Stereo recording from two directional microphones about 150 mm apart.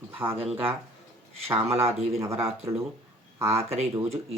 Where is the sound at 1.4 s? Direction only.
40° right (ahead or behind).